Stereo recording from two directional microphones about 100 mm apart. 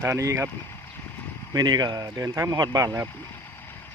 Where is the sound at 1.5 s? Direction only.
45° right (ahead or behind).